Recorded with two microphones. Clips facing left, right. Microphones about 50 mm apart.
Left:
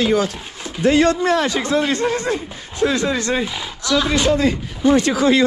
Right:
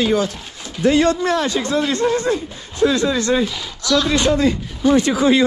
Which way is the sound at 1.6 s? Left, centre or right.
Left.